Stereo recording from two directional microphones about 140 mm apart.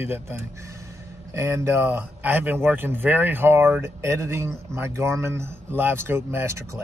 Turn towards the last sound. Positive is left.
turn(degrees=-15)  # may be behind; listen again after turning